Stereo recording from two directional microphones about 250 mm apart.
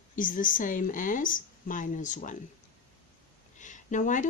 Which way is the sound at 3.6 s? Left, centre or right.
Left.